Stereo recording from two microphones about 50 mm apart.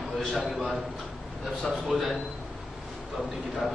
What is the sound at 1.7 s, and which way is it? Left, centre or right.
Speech, centre.